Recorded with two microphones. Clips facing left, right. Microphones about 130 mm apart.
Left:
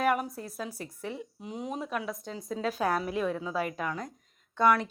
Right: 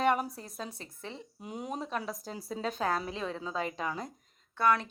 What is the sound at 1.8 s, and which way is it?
Speech, 30° right (ahead or behind).